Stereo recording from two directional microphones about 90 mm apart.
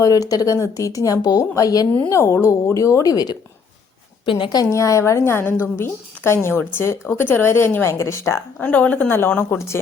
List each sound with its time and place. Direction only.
0.0 s a woman's voice: 40° left (ahead or behind)
2.0 s a woman's voice: 30° left (ahead or behind)
4.3 s a woman's voice: 70° left (ahead or behind)
4.5 s a woman's voice: 35° left (ahead or behind)
8.5 s a woman's voice: 15° left (ahead or behind)